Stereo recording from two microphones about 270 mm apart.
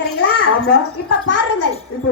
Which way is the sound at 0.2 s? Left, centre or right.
Left.